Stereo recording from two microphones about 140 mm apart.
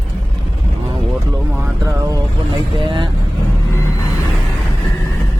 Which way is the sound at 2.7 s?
35° right (ahead or behind).